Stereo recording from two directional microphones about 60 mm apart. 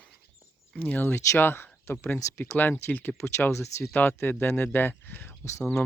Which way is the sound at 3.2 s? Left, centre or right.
Left.